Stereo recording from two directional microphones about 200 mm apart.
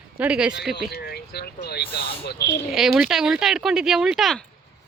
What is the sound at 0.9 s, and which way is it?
Speech, 50° left (ahead or behind).